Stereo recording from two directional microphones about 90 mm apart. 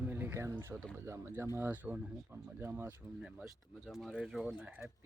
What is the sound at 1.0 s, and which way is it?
Speech, 30° right (ahead or behind).